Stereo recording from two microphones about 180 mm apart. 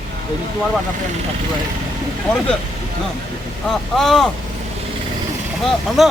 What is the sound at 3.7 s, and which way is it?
Speech, centre (ahead or behind).